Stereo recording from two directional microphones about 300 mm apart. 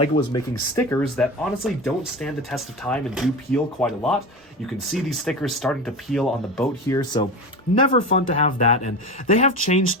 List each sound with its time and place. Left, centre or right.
0.3 s speech: centre
6.8 s speech: centre